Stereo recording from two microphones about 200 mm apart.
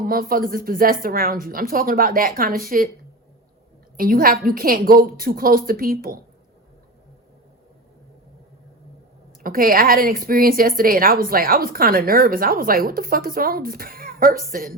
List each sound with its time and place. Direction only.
0.0 s a woman's voice: 45° right (ahead or behind)
3.9 s a woman's voice: 45° right (ahead or behind)
9.4 s a woman's voice: 45° right (ahead or behind)